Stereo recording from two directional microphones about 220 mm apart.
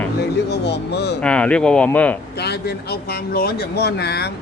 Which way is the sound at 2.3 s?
50° left (ahead or behind).